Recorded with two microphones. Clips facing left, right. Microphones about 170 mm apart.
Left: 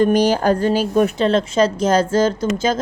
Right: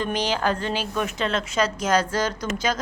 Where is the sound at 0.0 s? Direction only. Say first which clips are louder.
Left 10 dB; 45° left (ahead or behind).